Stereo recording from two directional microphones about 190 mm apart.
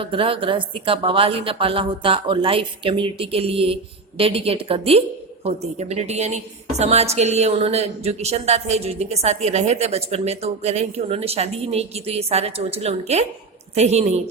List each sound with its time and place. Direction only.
0.0 s a woman's voice: 25° right (ahead or behind)